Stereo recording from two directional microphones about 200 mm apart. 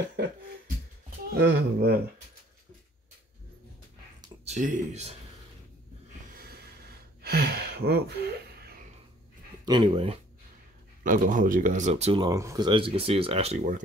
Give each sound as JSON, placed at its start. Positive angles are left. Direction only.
{"t": 1.3, "sound": "speech", "side_deg": -55}
{"t": 4.5, "sound": "speech", "side_deg": -35}
{"t": 6.3, "sound": "a sound", "side_deg": -50}
{"t": 9.7, "sound": "speech", "side_deg": -25}
{"t": 11.1, "sound": "speech", "side_deg": -40}
{"t": 13.6, "sound": "speech", "side_deg": -40}